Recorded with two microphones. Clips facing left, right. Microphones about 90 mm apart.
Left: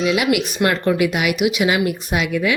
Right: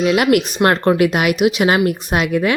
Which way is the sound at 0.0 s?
50° right (ahead or behind).